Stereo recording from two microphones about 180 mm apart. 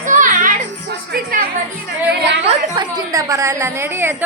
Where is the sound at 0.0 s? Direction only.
45° right (ahead or behind).